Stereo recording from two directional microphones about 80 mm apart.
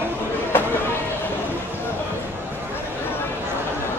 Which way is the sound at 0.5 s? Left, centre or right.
Left.